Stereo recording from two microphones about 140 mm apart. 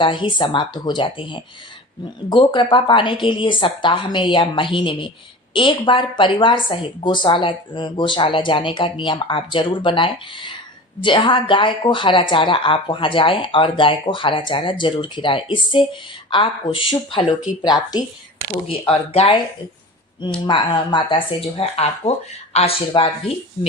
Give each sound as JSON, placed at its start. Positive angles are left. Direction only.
{"t": 0.0, "sound": "a woman's voice", "side_deg": 35}
{"t": 18.7, "sound": "speech", "side_deg": 40}
{"t": 20.5, "sound": "a woman's voice", "side_deg": 35}
{"t": 22.9, "sound": "a woman's voice", "side_deg": 35}